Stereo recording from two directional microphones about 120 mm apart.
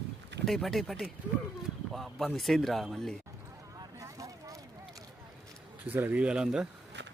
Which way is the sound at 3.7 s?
30° right (ahead or behind).